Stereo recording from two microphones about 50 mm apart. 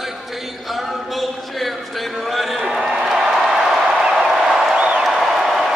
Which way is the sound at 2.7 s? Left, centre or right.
Centre.